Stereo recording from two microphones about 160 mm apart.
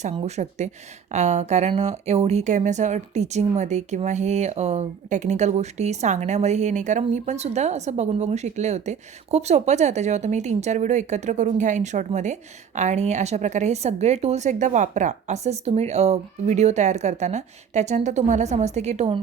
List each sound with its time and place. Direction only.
0.0 s speech: 40° right (ahead or behind)